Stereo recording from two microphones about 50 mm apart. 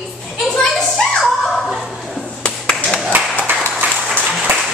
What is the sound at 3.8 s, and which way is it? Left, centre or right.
Applause, right.